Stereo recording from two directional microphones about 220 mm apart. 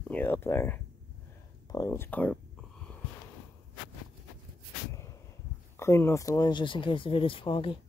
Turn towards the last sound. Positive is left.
turn(degrees=25)  # may be behind; listen again after turning